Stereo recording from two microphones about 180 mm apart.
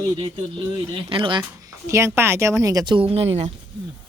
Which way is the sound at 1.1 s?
25° right (ahead or behind).